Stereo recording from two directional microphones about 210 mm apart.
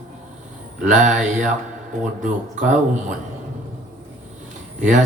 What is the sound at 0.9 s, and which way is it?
Speech, 35° right (ahead or behind).